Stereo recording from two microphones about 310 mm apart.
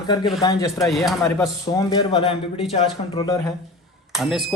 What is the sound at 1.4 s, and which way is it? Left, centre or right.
Speech, centre.